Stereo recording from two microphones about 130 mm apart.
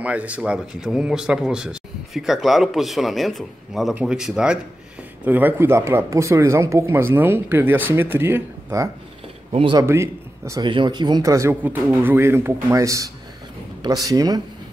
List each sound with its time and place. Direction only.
0.0 s speech: 10° right (ahead or behind)
9.5 s speech: 45° right (ahead or behind)
9.8 s a man's voice: 20° right (ahead or behind)
10.6 s speech: 35° right (ahead or behind)